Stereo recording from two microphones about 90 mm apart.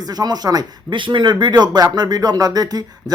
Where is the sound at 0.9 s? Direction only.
65° right (ahead or behind).